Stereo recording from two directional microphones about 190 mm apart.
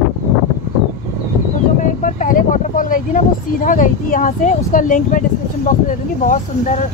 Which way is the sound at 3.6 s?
45° left (ahead or behind).